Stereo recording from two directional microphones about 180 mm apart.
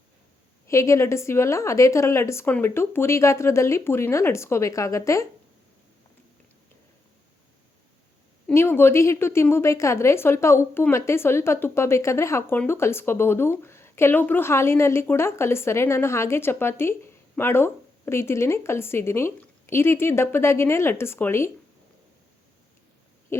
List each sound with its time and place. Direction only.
0.7 s a woman's voice: 15° left (ahead or behind)
8.4 s a woman's voice: 10° left (ahead or behind)